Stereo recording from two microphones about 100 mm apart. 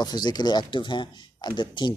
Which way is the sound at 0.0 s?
45° left (ahead or behind).